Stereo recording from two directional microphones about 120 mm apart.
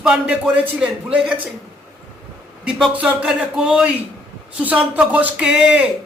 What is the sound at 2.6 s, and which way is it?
Speech, 10° right (ahead or behind).